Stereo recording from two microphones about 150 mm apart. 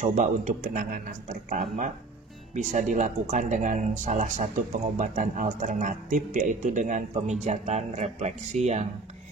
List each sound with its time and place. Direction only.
0.0 s speech: 55° right (ahead or behind)